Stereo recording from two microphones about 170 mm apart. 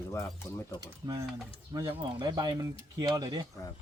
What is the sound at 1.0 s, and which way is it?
Speech, 20° right (ahead or behind).